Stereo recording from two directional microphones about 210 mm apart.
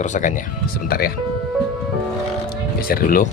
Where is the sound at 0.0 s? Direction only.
35° left (ahead or behind).